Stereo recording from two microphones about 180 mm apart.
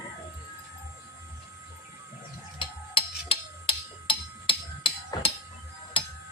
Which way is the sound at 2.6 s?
30° left (ahead or behind).